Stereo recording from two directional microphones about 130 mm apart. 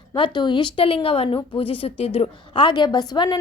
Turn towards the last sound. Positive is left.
turn(degrees=35)  # may be behind; listen again after turning